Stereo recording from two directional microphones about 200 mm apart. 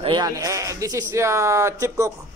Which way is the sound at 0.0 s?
20° right (ahead or behind).